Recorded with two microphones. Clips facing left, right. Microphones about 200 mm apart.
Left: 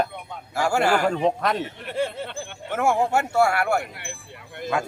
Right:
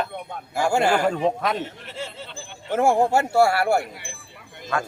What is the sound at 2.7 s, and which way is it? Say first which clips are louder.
Speech: right 3 dB; 30° right (ahead or behind).